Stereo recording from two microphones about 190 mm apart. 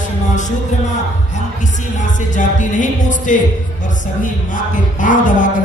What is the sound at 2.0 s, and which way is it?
Speech, 40° left (ahead or behind).